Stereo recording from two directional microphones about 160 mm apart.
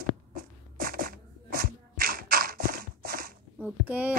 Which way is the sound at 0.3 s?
65° right (ahead or behind).